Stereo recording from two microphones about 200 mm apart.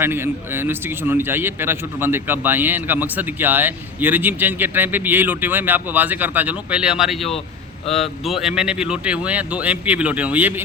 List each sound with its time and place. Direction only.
0.0 s a man's voice: 10° right (ahead or behind)